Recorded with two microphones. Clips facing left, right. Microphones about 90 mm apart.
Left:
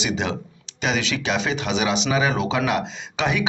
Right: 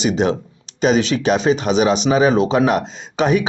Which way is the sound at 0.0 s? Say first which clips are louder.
Right 8 dB; 40° right (ahead or behind).